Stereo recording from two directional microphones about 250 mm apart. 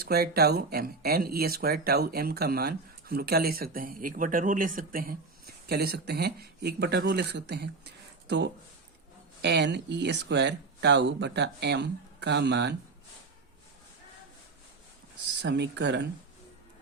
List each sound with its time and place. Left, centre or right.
0.0 s speech: right
15.4 s speech: right